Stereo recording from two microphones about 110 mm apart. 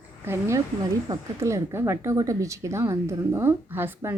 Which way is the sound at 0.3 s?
25° right (ahead or behind).